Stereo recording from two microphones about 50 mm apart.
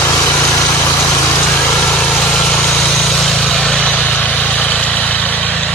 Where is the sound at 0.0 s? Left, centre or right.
Left.